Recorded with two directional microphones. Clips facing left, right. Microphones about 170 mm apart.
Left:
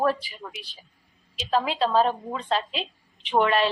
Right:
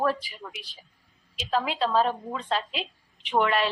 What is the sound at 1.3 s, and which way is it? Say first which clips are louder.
A woman's voice: left 2 dB; 30° left (ahead or behind).